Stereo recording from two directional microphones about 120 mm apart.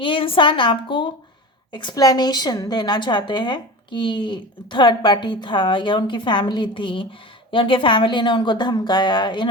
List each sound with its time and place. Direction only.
0.0 s a woman's voice: 45° left (ahead or behind)